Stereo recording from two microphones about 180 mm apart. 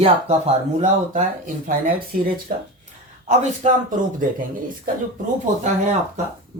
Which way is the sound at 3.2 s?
45° right (ahead or behind).